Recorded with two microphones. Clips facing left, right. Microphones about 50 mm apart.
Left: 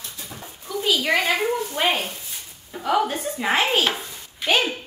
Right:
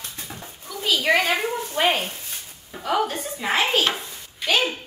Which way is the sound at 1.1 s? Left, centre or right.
Right.